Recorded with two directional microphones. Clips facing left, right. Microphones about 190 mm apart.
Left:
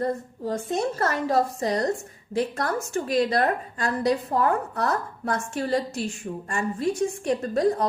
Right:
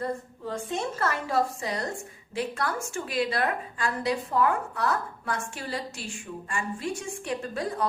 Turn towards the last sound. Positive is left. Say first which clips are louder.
# left 8 dB
turn(degrees=40)  # may be behind; listen again after turning